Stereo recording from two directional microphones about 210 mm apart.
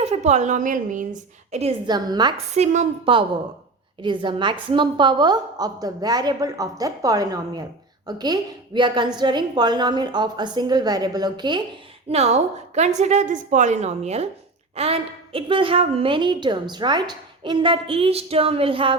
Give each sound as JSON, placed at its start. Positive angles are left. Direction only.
{"t": 0.0, "sound": "a woman's voice", "side_deg": -30}
{"t": 1.9, "sound": "a woman's voice", "side_deg": -20}